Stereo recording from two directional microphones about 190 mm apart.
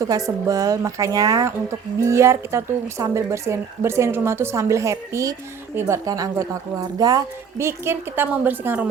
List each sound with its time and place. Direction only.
0.0 s speech: 15° right (ahead or behind)